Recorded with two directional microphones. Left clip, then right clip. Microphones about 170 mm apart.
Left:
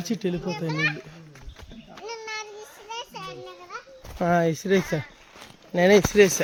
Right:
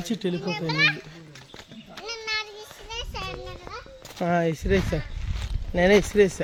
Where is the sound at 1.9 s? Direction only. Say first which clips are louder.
Right 4 dB; 45° right (ahead or behind).